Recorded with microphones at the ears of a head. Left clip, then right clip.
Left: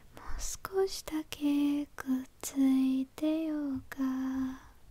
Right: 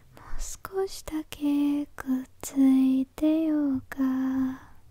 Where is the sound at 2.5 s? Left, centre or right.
Right.